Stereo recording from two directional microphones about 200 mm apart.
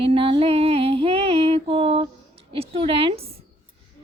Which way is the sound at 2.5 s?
25° right (ahead or behind).